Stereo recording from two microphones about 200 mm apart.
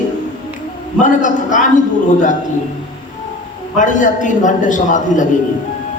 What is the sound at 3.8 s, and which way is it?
A man's voice, 40° left (ahead or behind).